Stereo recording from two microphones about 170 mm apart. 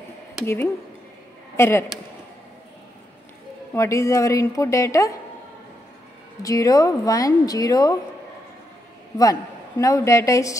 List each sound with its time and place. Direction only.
1.6 s a man's voice: 15° left (ahead or behind)
3.7 s speech: 15° left (ahead or behind)
6.4 s speech: 20° left (ahead or behind)
9.2 s speech: 20° left (ahead or behind)